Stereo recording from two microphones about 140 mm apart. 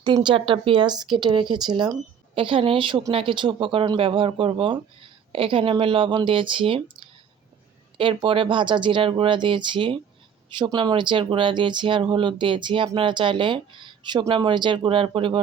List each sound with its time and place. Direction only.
0.0 s speech: 35° right (ahead or behind)